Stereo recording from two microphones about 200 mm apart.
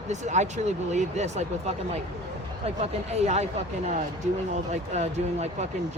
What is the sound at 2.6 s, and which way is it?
Speech, 30° right (ahead or behind).